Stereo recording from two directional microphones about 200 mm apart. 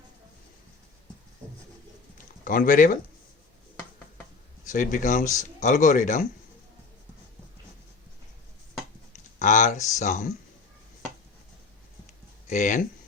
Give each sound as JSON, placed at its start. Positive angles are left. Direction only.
{"t": 2.4, "sound": "speech", "side_deg": 45}
{"t": 4.7, "sound": "speech", "side_deg": 40}
{"t": 5.2, "sound": "a man's voice", "side_deg": 15}
{"t": 5.5, "sound": "speech", "side_deg": 40}
{"t": 9.4, "sound": "speech", "side_deg": 40}
{"t": 12.5, "sound": "speech", "side_deg": 40}